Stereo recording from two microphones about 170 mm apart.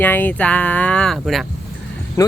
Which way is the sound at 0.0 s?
10° left (ahead or behind).